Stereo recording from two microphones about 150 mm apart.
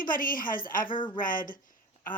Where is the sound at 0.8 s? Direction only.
35° left (ahead or behind).